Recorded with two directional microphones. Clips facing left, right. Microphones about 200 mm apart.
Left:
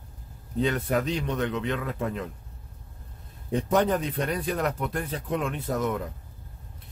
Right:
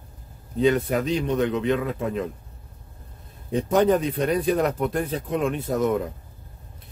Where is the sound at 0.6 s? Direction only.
15° right (ahead or behind).